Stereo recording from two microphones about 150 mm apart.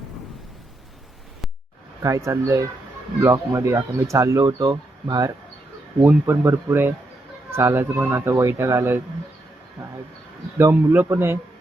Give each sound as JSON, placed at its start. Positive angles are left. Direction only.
{"t": 2.0, "sound": "speech", "side_deg": -20}
{"t": 10.6, "sound": "speech", "side_deg": -15}